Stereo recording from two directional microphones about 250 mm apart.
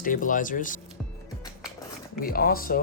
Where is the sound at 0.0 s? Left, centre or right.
Left.